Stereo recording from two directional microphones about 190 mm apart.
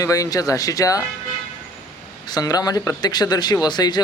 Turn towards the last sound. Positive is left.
turn(degrees=20)  # may be behind; listen again after turning